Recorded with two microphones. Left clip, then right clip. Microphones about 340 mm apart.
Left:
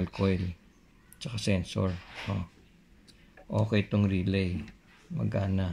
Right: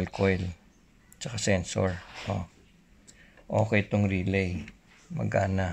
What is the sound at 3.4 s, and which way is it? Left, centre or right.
Speech, right.